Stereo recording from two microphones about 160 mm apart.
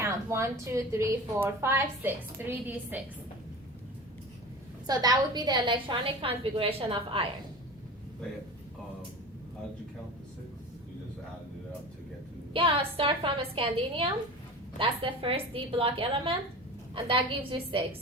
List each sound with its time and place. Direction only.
0.0 s a sound: 15° right (ahead or behind)
0.6 s a woman's voice: 15° right (ahead or behind)
4.9 s a woman's voice: 25° right (ahead or behind)
12.5 s a woman's voice: 35° right (ahead or behind)